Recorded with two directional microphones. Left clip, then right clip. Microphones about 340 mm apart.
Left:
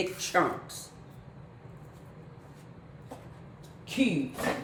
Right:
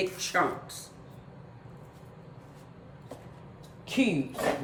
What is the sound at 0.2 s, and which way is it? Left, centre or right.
Speech, centre.